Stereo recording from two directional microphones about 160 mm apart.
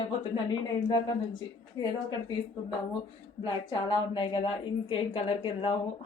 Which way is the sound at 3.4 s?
35° left (ahead or behind).